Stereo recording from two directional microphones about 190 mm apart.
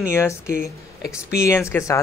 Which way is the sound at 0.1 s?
15° left (ahead or behind).